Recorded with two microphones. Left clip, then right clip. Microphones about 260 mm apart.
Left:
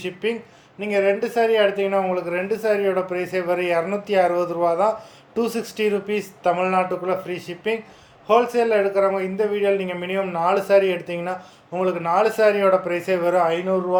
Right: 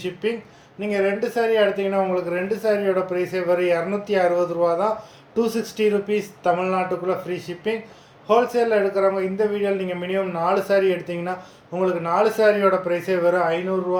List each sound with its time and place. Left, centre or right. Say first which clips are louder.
0.0 s a man's voice: even; centre